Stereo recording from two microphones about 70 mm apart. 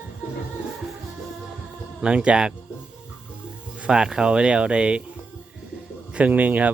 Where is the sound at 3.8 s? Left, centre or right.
Centre.